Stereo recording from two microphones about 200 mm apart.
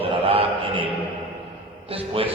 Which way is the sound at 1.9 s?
30° right (ahead or behind).